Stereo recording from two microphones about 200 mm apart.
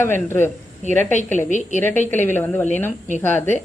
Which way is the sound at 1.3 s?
40° left (ahead or behind).